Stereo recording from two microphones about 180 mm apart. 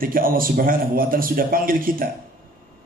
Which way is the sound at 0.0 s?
50° right (ahead or behind).